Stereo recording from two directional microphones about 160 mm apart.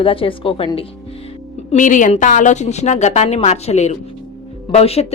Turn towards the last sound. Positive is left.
turn(degrees=40)  # may be behind; listen again after turning